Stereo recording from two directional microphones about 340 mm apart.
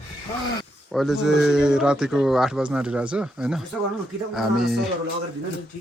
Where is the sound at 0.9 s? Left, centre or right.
Centre.